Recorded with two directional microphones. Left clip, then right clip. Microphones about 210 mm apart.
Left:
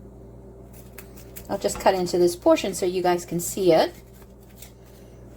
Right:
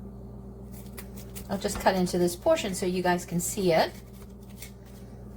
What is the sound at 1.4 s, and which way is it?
A woman's voice, 40° left (ahead or behind).